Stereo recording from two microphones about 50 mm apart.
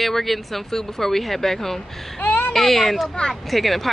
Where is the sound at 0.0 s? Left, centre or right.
Centre.